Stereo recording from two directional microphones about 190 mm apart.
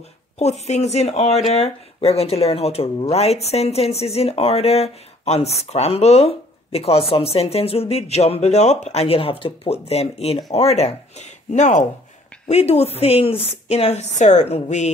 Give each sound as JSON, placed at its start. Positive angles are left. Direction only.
{"t": 0.4, "sound": "speech", "side_deg": 35}